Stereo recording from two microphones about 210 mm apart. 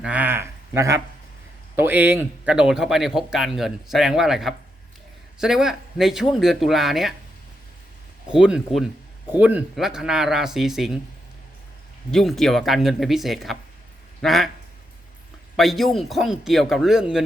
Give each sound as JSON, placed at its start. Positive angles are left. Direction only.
{"t": 0.0, "sound": "speech", "side_deg": -5}
{"t": 8.3, "sound": "speech", "side_deg": -5}
{"t": 12.1, "sound": "speech", "side_deg": 0}
{"t": 15.5, "sound": "speech", "side_deg": 0}